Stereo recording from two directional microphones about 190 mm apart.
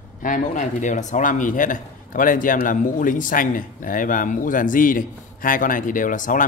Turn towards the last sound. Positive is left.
turn(degrees=45)  # may be behind; listen again after turning